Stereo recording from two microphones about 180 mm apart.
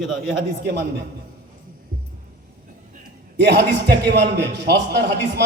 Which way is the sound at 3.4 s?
70° right (ahead or behind).